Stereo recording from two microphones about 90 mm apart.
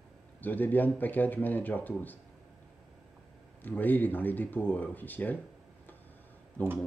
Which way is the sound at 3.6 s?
20° left (ahead or behind).